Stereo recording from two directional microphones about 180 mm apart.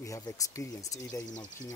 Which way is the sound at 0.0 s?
20° left (ahead or behind).